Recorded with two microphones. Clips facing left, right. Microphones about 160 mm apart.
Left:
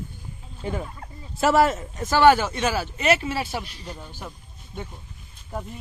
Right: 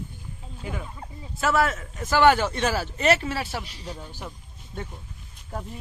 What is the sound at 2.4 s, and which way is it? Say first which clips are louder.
Speech: even; 5° left (ahead or behind).